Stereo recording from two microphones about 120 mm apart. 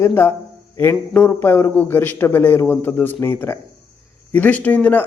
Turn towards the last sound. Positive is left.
turn(degrees=15)  # may be behind; listen again after turning